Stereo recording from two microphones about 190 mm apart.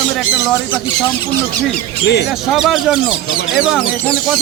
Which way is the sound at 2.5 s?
Centre (ahead or behind).